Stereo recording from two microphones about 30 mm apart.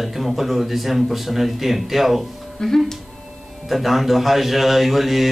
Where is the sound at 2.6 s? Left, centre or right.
Centre.